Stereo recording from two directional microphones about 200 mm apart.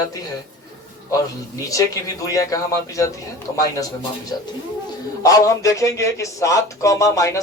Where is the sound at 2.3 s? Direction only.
15° left (ahead or behind).